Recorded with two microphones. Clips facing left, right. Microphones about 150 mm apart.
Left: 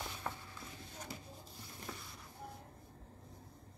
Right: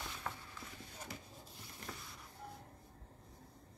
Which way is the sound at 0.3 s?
10° left (ahead or behind).